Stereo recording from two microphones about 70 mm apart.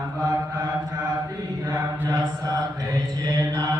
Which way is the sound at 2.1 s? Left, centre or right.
Right.